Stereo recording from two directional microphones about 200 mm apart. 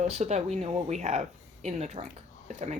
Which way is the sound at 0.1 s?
35° right (ahead or behind).